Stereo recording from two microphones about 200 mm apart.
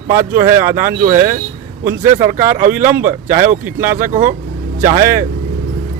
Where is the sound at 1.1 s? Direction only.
40° right (ahead or behind).